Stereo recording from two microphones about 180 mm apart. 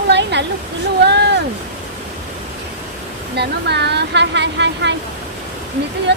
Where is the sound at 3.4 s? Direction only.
70° right (ahead or behind).